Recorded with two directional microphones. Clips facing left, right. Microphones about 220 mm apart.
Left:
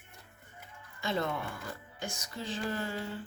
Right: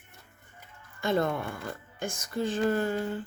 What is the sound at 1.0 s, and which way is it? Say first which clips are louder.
A woman's voice: right 6 dB; 50° right (ahead or behind).